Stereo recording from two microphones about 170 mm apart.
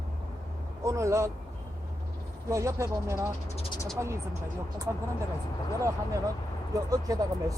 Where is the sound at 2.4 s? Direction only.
15° right (ahead or behind).